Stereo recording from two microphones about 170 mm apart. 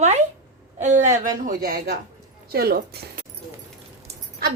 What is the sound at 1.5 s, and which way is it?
Speech, 55° right (ahead or behind).